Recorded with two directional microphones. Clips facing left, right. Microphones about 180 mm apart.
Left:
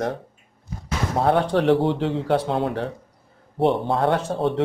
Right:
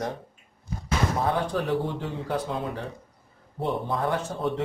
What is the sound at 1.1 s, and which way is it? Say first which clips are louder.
Speech: left 11 dB; 75° left (ahead or behind).